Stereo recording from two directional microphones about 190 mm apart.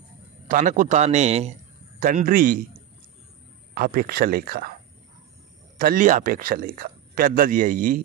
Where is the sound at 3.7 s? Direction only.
50° right (ahead or behind).